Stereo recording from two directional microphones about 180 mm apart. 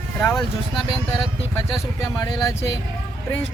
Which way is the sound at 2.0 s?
20° left (ahead or behind).